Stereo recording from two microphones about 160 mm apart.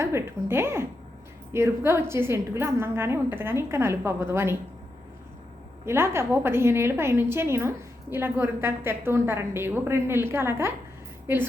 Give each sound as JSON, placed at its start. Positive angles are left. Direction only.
{"t": 0.0, "sound": "a woman's voice", "side_deg": -15}
{"t": 5.8, "sound": "a woman's voice", "side_deg": -15}